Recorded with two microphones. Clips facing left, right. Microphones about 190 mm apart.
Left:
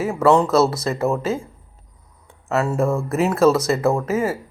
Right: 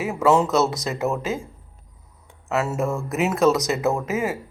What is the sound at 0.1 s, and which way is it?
Speech, 5° right (ahead or behind).